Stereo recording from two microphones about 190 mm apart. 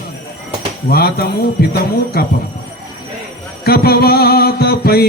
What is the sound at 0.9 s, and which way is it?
Speech, 55° left (ahead or behind).